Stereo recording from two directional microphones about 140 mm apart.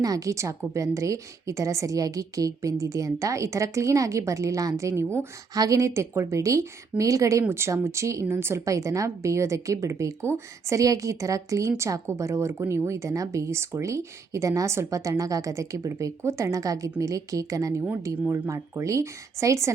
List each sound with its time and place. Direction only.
0.0 s a woman's voice: 25° right (ahead or behind)